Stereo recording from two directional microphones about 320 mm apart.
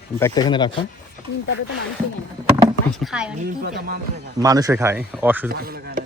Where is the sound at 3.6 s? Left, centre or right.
Right.